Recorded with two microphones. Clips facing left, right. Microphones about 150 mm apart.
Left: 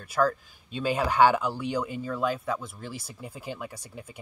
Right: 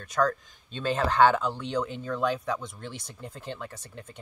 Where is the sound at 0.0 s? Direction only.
5° left (ahead or behind).